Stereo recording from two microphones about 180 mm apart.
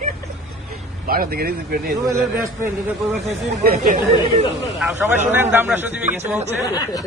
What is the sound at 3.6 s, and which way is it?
Speech, 55° right (ahead or behind).